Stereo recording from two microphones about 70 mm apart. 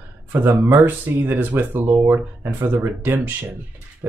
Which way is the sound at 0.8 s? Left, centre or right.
Right.